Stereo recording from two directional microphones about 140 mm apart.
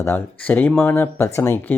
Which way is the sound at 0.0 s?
15° left (ahead or behind).